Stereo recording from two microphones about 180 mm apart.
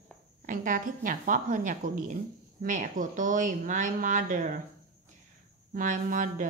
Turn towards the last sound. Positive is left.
turn(degrees=-45)  # may be behind; listen again after turning